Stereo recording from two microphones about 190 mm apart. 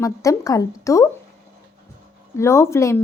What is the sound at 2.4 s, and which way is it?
Speech, 15° left (ahead or behind).